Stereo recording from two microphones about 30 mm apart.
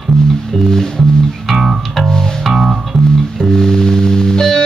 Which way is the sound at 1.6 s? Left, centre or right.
Centre.